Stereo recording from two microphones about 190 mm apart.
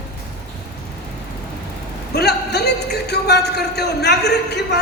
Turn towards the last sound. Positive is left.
turn(degrees=60)  # may be behind; listen again after turning